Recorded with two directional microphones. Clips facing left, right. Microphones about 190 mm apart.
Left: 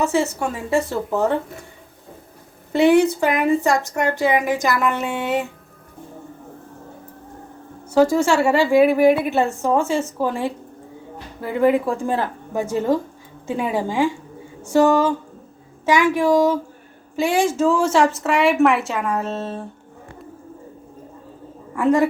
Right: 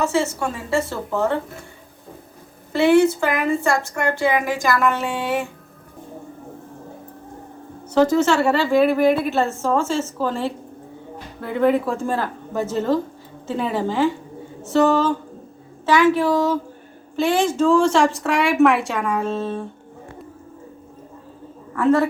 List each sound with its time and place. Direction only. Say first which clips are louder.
0.0 s a woman's voice: left 1 dB; 15° left (ahead or behind)
2.7 s a woman's voice: even; 15° left (ahead or behind)
7.9 s a woman's voice: even; 10° left (ahead or behind)
11.6 s a woman's voice: left 1 dB; 15° left (ahead or behind)
21.7 s a woman's voice: even; 15° left (ahead or behind)